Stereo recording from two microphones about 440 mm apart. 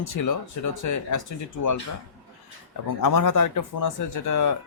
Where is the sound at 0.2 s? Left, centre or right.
Left.